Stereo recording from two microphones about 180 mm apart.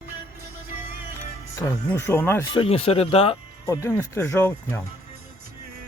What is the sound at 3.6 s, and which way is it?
Speech, 15° left (ahead or behind).